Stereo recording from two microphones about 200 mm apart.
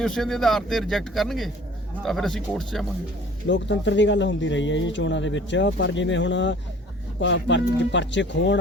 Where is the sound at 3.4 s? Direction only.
65° left (ahead or behind).